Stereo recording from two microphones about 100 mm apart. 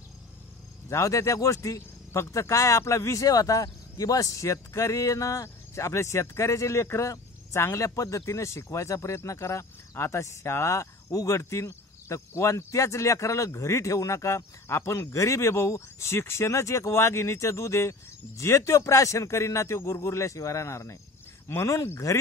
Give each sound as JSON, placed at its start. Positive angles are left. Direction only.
{"t": 0.8, "sound": "speech", "side_deg": 30}